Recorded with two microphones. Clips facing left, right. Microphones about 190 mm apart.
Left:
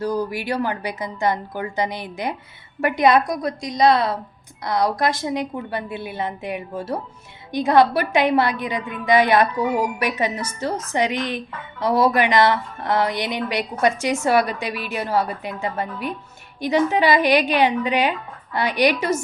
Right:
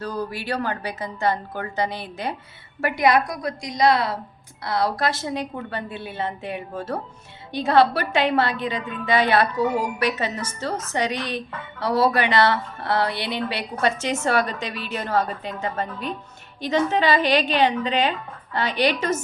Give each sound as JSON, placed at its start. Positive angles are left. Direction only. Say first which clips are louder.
{"t": 0.0, "sound": "a woman's voice", "louder": "left 5 dB", "side_deg": 15}